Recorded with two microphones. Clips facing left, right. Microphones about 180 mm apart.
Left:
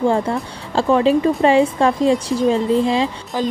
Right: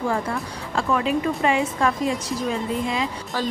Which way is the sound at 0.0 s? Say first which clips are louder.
Left 7 dB; 30° left (ahead or behind).